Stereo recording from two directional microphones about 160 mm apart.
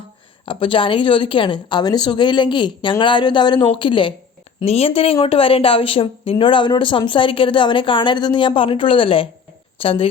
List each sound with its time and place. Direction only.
0.4 s a woman's voice: 35° left (ahead or behind)